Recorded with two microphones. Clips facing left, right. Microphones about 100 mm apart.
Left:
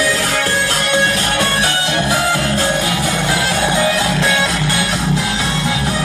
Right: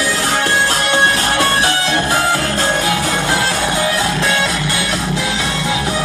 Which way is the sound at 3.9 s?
15° left (ahead or behind).